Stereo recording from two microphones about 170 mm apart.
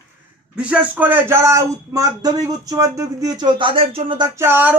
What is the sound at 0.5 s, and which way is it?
Speech, 5° right (ahead or behind).